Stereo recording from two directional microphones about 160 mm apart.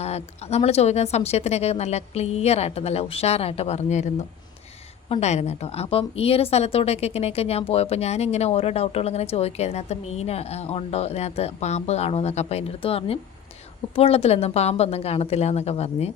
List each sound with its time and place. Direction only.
0.0 s a woman's voice: 40° left (ahead or behind)